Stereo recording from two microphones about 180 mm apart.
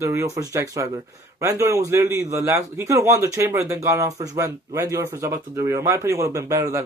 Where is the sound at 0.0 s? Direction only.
15° right (ahead or behind).